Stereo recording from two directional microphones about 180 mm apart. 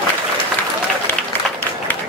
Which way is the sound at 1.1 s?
10° left (ahead or behind).